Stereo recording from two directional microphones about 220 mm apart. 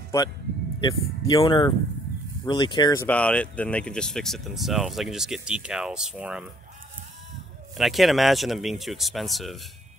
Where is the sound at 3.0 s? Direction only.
5° left (ahead or behind).